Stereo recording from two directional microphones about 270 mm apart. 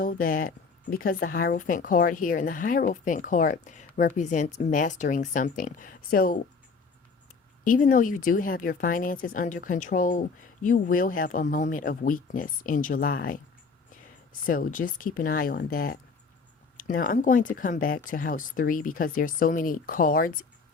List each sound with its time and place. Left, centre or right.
0.0 s speech: left
7.6 s speech: left
14.4 s speech: left